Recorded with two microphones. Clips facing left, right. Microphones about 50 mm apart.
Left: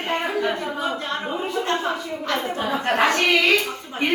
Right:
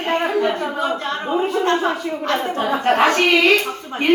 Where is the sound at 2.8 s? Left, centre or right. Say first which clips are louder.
Right 4 dB; right.